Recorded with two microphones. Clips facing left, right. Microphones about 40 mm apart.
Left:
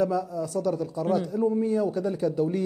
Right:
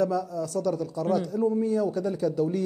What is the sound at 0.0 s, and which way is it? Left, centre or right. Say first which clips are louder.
A man's voice: even; centre.